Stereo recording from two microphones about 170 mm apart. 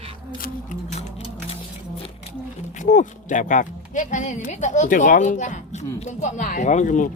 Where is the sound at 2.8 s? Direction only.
45° left (ahead or behind).